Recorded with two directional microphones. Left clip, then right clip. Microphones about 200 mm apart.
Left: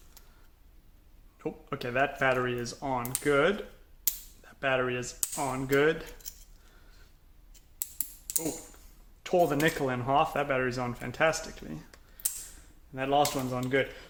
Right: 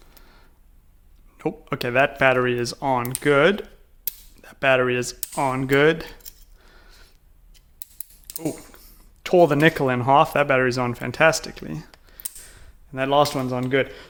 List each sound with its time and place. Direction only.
1.4 s speech: 55° right (ahead or behind)
7.8 s a sound: centre (ahead or behind)
9.2 s speech: 60° right (ahead or behind)
12.9 s speech: 60° right (ahead or behind)